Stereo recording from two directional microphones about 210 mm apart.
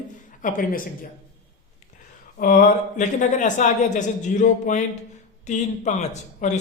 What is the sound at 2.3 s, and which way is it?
Speech, 40° left (ahead or behind).